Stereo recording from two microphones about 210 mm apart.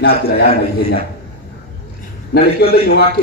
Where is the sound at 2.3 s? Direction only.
50° left (ahead or behind).